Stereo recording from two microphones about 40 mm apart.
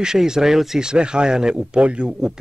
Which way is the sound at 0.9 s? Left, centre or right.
Right.